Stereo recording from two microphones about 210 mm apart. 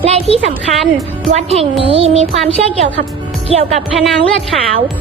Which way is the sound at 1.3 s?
30° right (ahead or behind).